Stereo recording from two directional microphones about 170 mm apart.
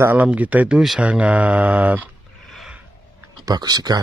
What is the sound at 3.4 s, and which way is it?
Speech, 25° right (ahead or behind).